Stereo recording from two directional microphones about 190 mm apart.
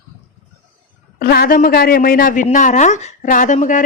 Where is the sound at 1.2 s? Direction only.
50° left (ahead or behind).